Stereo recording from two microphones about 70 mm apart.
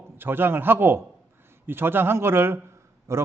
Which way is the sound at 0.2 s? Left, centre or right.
Right.